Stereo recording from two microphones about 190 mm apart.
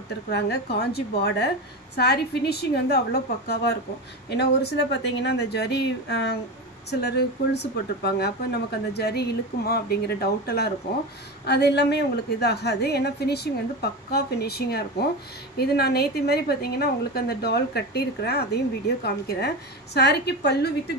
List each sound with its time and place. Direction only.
0.3 s a woman's voice: 60° left (ahead or behind)